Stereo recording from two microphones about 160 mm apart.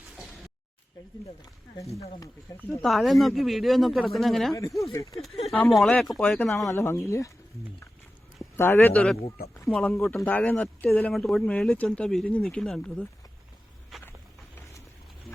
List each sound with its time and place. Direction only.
0.2 s a sound: centre (ahead or behind)
2.0 s speech: 20° left (ahead or behind)
2.8 s speech: centre (ahead or behind)
4.8 s speech: 20° left (ahead or behind)
5.5 s speech: 5° left (ahead or behind); by 7.3 s 20° left (ahead or behind)
8.5 s speech: 15° left (ahead or behind)
13.9 s a sound: centre (ahead or behind)